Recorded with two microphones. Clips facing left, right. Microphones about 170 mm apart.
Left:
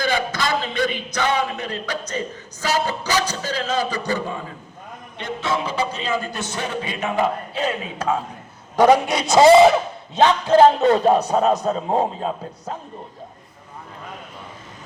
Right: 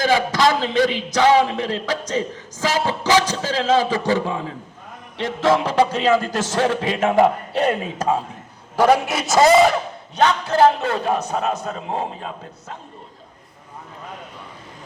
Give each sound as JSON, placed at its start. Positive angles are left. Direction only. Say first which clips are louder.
{"t": 0.0, "sound": "speech", "louder": "right 5 dB", "side_deg": -90}
{"t": 7.5, "sound": "a man's voice", "louder": "right 5 dB", "side_deg": -65}
{"t": 7.9, "sound": "a man's voice", "louder": "right 2 dB", "side_deg": -35}
{"t": 9.0, "sound": "a man's voice", "louder": "left 3 dB", "side_deg": 0}
{"t": 10.4, "sound": "speech", "louder": "left 6 dB", "side_deg": 20}
{"t": 11.0, "sound": "a man's voice", "louder": "left 5 dB", "side_deg": 35}